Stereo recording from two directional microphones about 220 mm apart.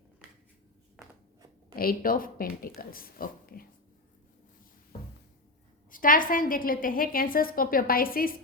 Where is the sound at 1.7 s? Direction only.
40° left (ahead or behind).